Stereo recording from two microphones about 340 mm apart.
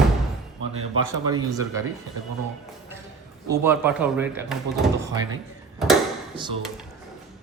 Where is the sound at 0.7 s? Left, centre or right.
Right.